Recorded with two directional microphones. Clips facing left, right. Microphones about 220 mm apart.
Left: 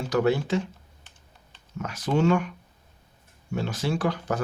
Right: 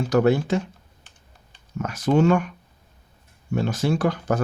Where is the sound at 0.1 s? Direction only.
45° right (ahead or behind).